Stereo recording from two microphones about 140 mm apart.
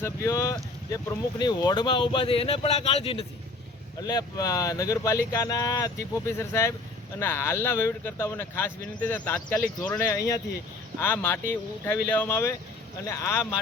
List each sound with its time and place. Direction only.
0.0 s speech: 20° left (ahead or behind); by 3.2 s 45° left (ahead or behind)
4.0 s speech: 30° left (ahead or behind); by 10.1 s 10° left (ahead or behind)
10.1 s speech: 25° left (ahead or behind)